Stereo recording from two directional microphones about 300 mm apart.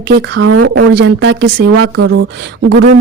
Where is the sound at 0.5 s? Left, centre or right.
Right.